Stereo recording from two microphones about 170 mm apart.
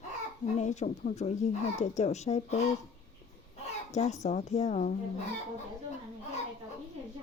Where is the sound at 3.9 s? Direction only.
40° left (ahead or behind).